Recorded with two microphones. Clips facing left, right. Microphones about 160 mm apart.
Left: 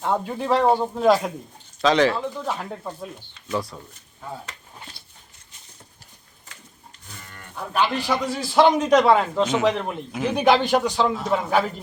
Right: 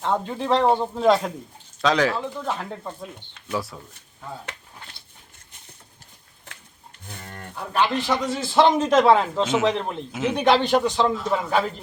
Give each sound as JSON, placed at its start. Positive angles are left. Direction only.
{"t": 0.0, "sound": "speech", "side_deg": 10}
{"t": 7.1, "sound": "livestock", "side_deg": -50}
{"t": 7.7, "sound": "speech", "side_deg": 5}